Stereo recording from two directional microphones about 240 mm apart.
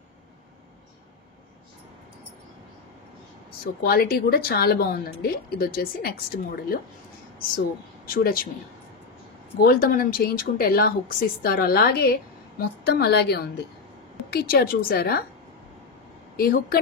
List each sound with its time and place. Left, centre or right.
3.8 s speech: left
8.1 s speech: left
9.7 s speech: left
16.3 s speech: left